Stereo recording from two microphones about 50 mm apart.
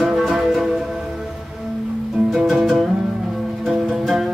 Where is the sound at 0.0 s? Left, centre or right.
Centre.